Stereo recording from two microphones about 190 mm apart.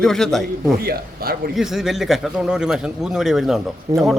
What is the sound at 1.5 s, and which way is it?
A man's voice, centre (ahead or behind).